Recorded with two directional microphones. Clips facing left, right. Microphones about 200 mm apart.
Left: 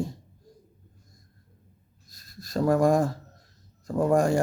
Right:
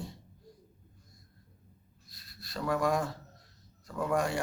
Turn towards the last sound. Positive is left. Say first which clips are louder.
# left 9 dB
turn(degrees=45)  # may be behind; listen again after turning